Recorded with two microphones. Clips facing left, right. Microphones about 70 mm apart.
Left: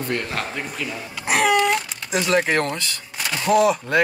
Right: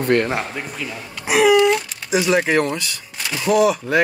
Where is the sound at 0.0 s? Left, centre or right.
Right.